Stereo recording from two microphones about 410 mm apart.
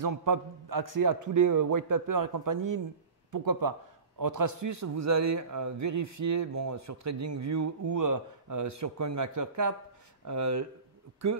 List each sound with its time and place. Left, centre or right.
0.0 s a man's voice: right